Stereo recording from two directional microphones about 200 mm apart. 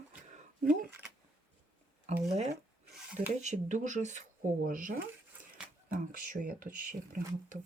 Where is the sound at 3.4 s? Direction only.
35° right (ahead or behind).